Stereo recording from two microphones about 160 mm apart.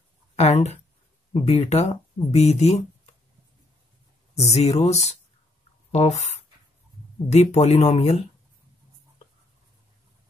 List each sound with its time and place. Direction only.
0.4 s speech: 45° left (ahead or behind)
4.4 s speech: 40° left (ahead or behind)